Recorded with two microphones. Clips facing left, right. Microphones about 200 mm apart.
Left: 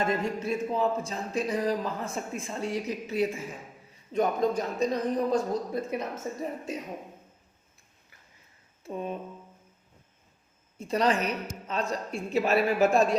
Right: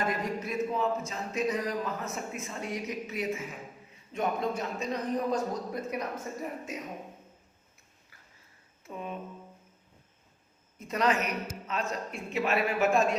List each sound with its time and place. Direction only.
0.1 s speech: 30° left (ahead or behind)
8.8 s a sound: 35° left (ahead or behind)
10.8 s speech: 30° left (ahead or behind)